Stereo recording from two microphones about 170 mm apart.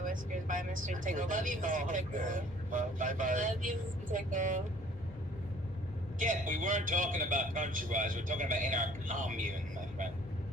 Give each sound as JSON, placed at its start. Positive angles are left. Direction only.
{"t": 0.0, "sound": "speech", "side_deg": -50}
{"t": 6.1, "sound": "speech", "side_deg": -50}